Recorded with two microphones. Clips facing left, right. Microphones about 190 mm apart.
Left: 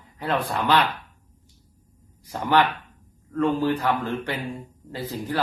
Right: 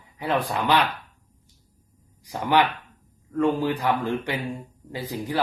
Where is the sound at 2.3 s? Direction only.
15° right (ahead or behind).